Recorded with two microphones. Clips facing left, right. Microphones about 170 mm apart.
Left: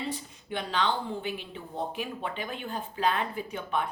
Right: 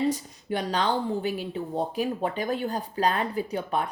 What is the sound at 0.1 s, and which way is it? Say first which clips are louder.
Speech: right 6 dB; 40° right (ahead or behind).